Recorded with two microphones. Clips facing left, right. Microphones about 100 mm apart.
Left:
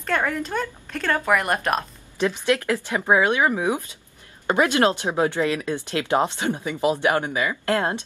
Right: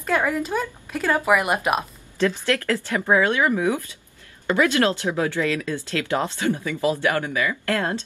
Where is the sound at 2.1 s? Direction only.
20° left (ahead or behind).